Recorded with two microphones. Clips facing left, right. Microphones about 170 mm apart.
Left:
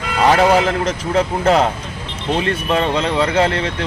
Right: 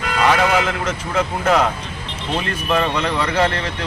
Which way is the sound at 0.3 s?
35° left (ahead or behind).